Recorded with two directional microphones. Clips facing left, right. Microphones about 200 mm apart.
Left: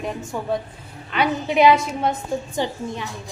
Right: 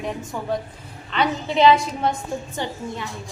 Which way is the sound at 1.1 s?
10° left (ahead or behind).